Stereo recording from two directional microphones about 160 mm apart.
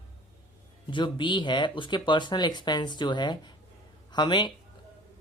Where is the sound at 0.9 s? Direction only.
30° left (ahead or behind).